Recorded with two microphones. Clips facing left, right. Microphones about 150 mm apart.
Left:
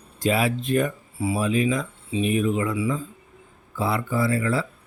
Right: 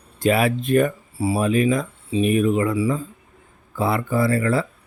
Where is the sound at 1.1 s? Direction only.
35° right (ahead or behind).